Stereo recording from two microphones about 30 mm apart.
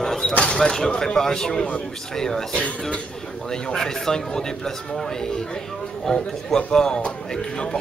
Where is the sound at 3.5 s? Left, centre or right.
Centre.